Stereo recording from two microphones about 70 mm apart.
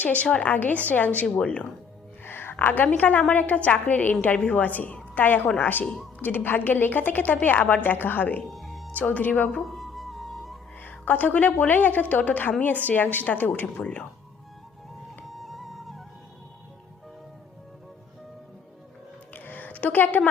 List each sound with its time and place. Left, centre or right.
0.0 s a woman's voice: left
2.2 s a sound: left
2.9 s a woman's voice: left
5.8 s speech: centre
6.1 s a woman's voice: left
8.4 s music: centre
8.9 s a woman's voice: left
9.6 s music: centre
10.8 s a woman's voice: left
15.3 s music: centre
19.3 s a sound: left